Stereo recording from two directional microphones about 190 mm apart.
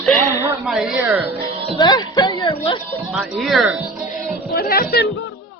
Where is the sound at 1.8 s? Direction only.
20° left (ahead or behind).